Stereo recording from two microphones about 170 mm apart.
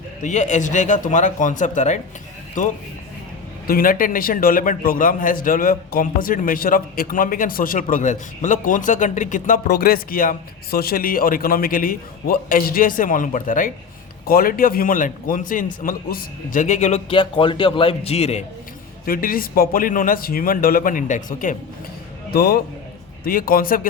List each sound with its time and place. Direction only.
0.2 s a man's voice: 45° left (ahead or behind)
17.1 s a man's voice: 30° left (ahead or behind)
19.0 s a man's voice: 60° left (ahead or behind)
22.3 s a man's voice: 65° left (ahead or behind)